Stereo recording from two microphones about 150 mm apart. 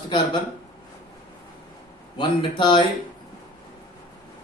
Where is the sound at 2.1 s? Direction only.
30° left (ahead or behind).